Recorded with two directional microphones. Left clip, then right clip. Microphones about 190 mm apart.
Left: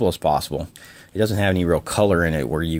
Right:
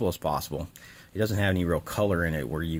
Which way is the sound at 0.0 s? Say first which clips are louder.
Left 9 dB; 15° left (ahead or behind).